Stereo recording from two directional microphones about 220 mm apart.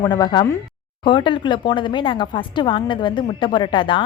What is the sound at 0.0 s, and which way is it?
Speech, 20° left (ahead or behind).